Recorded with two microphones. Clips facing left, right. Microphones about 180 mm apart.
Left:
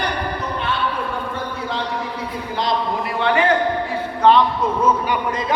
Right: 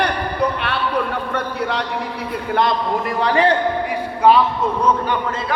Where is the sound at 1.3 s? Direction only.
70° right (ahead or behind).